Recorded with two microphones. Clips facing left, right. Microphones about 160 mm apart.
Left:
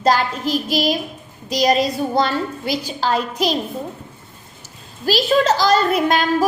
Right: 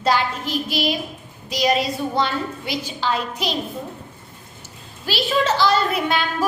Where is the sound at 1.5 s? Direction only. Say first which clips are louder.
Left 3 dB; 40° left (ahead or behind).